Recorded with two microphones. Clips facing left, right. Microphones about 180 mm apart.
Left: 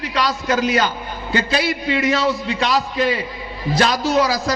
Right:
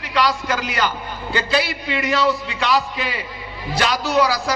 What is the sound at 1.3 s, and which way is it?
A man's voice, 45° left (ahead or behind).